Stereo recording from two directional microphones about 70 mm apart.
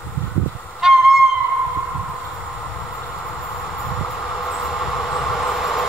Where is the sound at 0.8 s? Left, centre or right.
Centre.